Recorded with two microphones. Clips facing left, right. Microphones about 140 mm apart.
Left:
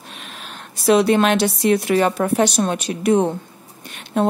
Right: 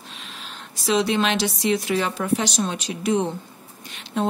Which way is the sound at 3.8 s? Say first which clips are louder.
Left 5 dB; 55° left (ahead or behind).